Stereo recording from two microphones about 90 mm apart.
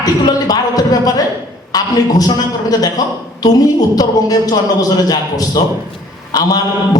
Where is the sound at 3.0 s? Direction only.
45° left (ahead or behind).